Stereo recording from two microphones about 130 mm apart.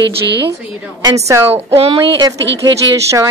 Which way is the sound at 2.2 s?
30° right (ahead or behind).